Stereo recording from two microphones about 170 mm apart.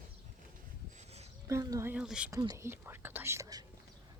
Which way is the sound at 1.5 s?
20° right (ahead or behind).